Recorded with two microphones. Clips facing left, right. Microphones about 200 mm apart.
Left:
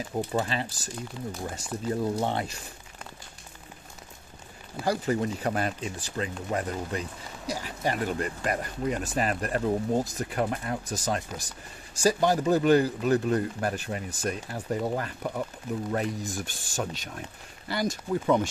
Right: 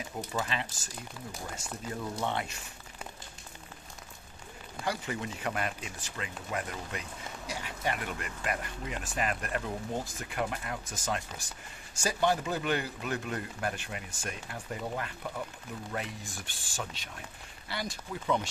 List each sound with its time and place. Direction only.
0.3 s speech: 35° left (ahead or behind)
1.9 s speech: 35° left (ahead or behind)
4.8 s speech: 40° left (ahead or behind)